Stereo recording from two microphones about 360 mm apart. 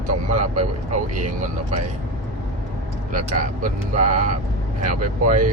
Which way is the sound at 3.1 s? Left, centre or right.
Right.